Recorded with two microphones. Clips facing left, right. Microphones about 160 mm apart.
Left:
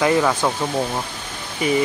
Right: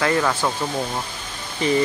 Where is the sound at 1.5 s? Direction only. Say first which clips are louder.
Even; 10° left (ahead or behind).